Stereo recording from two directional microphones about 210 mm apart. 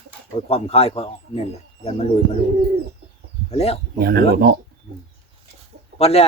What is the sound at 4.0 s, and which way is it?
Speech, 50° right (ahead or behind).